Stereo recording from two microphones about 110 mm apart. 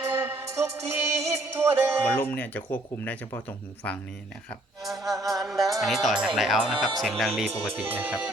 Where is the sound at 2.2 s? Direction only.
15° left (ahead or behind).